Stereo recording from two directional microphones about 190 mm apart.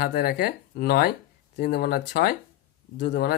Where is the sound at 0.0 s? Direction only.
55° left (ahead or behind).